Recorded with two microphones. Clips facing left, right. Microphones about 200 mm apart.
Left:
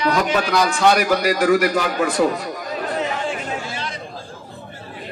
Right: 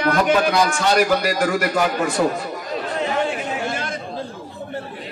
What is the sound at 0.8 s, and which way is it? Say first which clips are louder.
Speech: left 1 dB; 55° left (ahead or behind).